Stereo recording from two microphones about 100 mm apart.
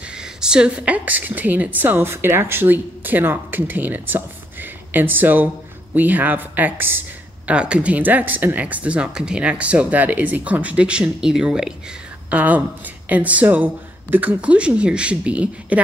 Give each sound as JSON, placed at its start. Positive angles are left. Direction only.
{"t": 0.1, "sound": "a woman's voice", "side_deg": -5}